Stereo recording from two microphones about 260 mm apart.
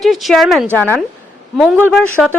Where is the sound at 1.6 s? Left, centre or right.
Centre.